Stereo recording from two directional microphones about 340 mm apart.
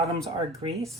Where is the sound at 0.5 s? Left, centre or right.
Centre.